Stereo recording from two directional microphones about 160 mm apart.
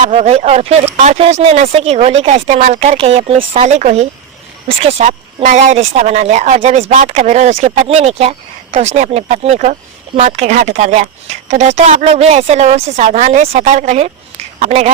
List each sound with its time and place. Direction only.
0.1 s speech: 40° right (ahead or behind)